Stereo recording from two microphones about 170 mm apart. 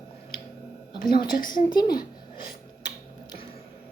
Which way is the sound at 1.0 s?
25° left (ahead or behind).